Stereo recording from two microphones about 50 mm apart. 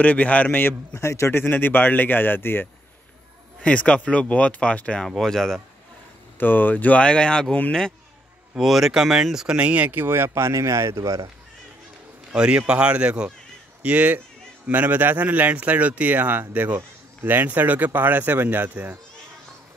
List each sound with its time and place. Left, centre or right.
0.0 s a man's voice: left
0.9 s a man's voice: left
1.3 s speech: left
3.6 s speech: left
5.0 s speech: centre
6.4 s speech: left; by 7.4 s centre
8.5 s speech: centre
9.6 s speech: right
9.9 s speech: right
12.4 s a man's voice: right